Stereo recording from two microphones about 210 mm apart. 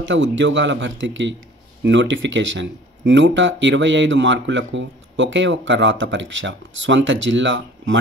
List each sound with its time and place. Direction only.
0.0 s speech: 60° right (ahead or behind)